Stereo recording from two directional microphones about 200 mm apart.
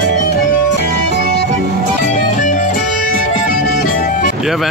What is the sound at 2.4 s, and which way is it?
Music, 40° left (ahead or behind).